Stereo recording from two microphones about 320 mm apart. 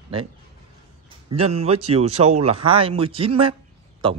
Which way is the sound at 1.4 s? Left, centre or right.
Centre.